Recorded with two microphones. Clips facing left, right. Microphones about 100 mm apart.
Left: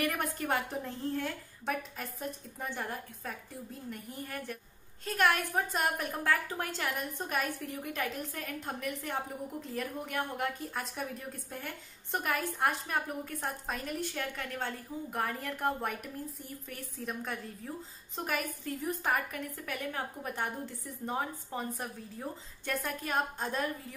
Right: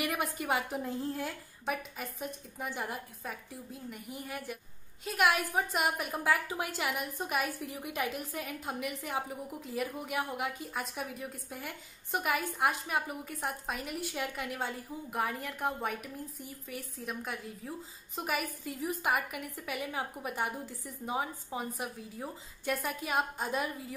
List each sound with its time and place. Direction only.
0.0 s a woman's voice: 5° right (ahead or behind)